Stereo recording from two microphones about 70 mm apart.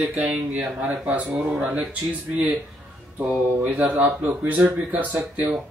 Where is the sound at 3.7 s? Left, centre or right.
Right.